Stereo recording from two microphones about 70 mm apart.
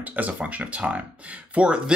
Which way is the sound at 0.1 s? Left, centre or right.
Right.